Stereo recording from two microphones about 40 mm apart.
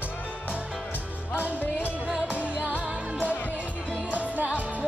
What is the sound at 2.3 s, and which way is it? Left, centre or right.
Music, right.